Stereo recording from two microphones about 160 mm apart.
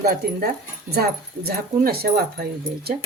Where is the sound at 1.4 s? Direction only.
75° right (ahead or behind).